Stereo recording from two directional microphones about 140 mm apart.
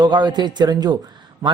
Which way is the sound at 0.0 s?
30° right (ahead or behind).